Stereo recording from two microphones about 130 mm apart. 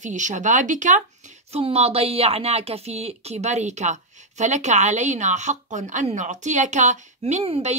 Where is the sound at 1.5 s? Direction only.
50° right (ahead or behind).